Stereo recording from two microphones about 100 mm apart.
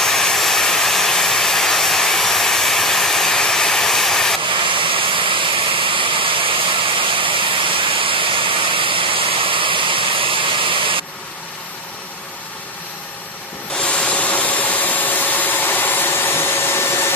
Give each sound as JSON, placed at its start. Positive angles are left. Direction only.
{"t": 0.0, "sound": "vehicle", "side_deg": 5}
{"t": 4.6, "sound": "vehicle", "side_deg": -60}
{"t": 13.7, "sound": "rub", "side_deg": 10}